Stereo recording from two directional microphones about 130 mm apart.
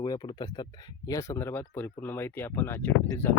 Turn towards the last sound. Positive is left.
turn(degrees=20)  # may be behind; listen again after turning